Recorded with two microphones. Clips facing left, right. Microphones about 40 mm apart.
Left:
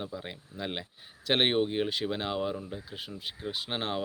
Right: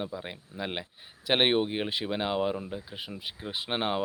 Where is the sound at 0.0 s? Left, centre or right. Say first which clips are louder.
Right 2 dB; centre.